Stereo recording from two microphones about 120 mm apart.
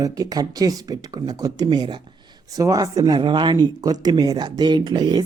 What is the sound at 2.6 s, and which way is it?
Speech, 30° right (ahead or behind).